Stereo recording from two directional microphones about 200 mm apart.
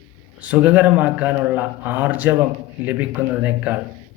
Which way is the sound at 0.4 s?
5° right (ahead or behind).